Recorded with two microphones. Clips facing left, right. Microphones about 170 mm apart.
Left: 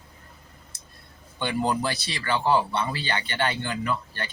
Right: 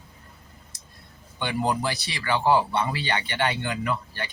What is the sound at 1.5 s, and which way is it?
A man's voice, 15° right (ahead or behind).